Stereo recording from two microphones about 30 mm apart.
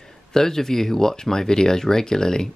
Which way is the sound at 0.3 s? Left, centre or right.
Centre.